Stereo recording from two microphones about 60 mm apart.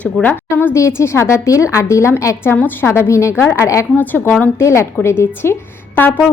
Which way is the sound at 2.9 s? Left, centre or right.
Left.